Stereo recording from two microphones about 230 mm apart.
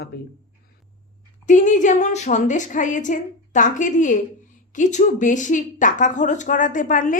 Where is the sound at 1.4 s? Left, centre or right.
Left.